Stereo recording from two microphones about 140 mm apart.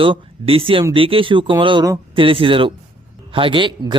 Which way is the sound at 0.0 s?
40° right (ahead or behind).